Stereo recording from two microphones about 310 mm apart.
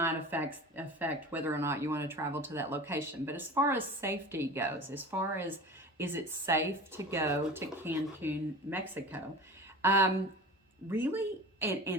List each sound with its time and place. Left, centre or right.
0.0 s speech: centre